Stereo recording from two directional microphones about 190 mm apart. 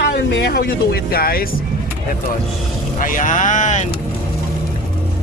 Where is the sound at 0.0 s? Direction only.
60° left (ahead or behind).